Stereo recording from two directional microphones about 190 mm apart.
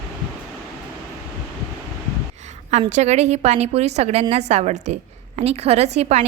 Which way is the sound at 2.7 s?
35° right (ahead or behind).